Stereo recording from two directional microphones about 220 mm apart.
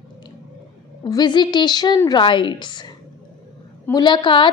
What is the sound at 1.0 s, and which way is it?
A woman's voice, 20° left (ahead or behind).